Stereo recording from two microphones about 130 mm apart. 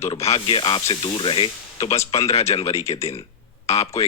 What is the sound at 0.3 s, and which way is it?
Speech, 45° left (ahead or behind).